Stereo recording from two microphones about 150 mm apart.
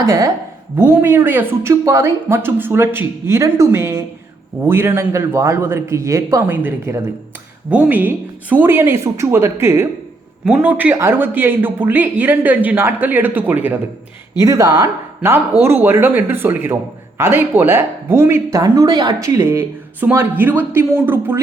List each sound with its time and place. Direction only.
0.8 s speech: 15° right (ahead or behind)